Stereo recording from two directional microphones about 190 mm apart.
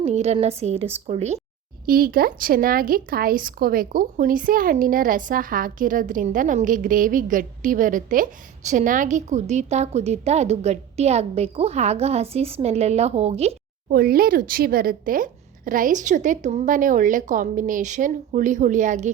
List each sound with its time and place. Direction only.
0.0 s a woman's voice: 35° right (ahead or behind)
1.9 s speech: 50° right (ahead or behind); by 13.6 s 35° right (ahead or behind)
13.9 s speech: 50° right (ahead or behind)